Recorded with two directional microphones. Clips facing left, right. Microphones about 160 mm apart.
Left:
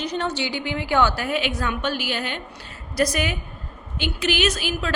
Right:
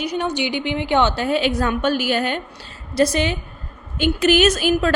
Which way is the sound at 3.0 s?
25° right (ahead or behind).